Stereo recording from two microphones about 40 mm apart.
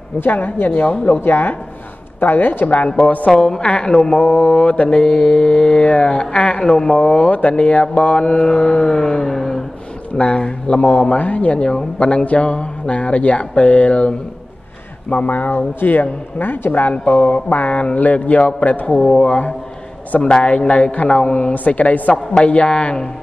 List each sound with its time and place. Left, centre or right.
0.2 s a woman's voice: left
3.3 s a woman's voice: centre
3.6 s mantra: left
4.1 s speech: left
4.4 s mantra: left
7.2 s mantra: left; by 9.7 s centre
10.1 s mantra: left
11.7 s mantra: left
12.3 s speech: left
15.0 s speech: left
18.9 s a woman's voice: centre
19.1 s speech: left
22.1 s mantra: left